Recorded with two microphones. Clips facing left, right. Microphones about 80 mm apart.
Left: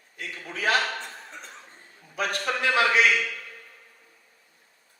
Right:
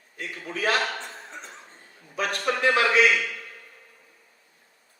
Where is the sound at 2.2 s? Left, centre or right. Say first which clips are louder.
Right 2 dB; right.